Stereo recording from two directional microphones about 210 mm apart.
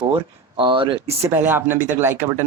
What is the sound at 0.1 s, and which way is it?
Speech, 25° right (ahead or behind).